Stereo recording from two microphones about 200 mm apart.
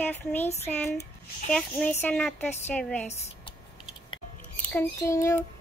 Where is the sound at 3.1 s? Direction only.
25° left (ahead or behind).